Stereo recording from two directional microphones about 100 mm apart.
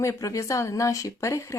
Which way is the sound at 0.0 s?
30° left (ahead or behind).